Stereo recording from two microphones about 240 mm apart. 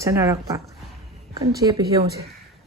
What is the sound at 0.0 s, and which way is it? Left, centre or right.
Speech, centre.